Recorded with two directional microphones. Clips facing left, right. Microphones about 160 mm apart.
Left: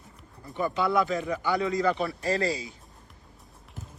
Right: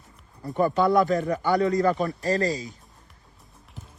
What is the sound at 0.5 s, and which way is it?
A man's voice, 45° right (ahead or behind).